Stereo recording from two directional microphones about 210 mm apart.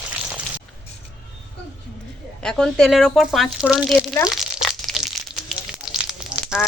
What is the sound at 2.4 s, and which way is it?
Speech, centre (ahead or behind).